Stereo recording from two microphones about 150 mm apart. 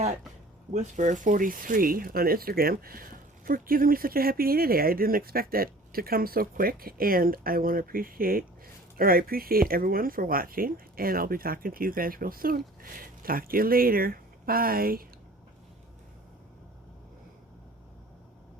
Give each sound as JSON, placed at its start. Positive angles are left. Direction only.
{"t": 0.7, "sound": "speech", "side_deg": -55}